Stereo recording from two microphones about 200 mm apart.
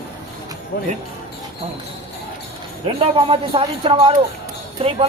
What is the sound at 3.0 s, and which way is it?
Speech, 25° right (ahead or behind).